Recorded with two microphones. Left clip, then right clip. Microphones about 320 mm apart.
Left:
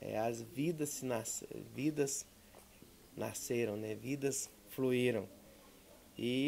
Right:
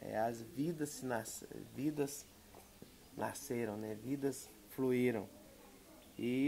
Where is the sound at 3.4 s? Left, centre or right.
Left.